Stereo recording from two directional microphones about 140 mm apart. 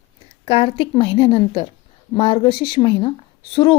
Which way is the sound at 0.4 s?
40° left (ahead or behind).